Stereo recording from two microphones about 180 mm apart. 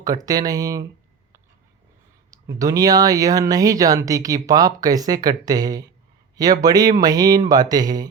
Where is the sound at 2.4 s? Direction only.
20° right (ahead or behind).